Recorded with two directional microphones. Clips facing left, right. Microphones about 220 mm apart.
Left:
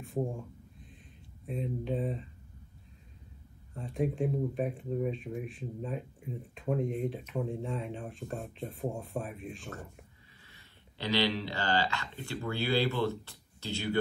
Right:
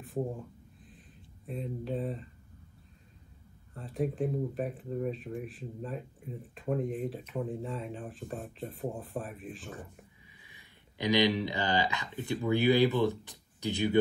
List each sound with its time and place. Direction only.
1.4 s speech: centre (ahead or behind)
3.7 s speech: centre (ahead or behind)
10.4 s speech: 15° right (ahead or behind)